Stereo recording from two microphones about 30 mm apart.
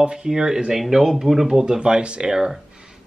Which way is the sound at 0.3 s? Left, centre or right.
Centre.